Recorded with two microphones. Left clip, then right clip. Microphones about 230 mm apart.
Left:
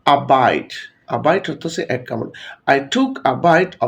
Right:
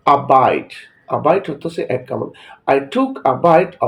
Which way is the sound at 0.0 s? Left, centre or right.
Left.